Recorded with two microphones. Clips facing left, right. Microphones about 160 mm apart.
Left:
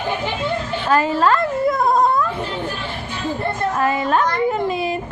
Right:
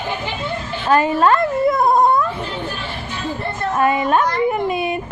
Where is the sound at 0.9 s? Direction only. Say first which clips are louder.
Right 2 dB; 20° right (ahead or behind).